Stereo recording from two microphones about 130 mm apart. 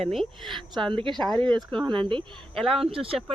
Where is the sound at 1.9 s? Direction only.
40° right (ahead or behind).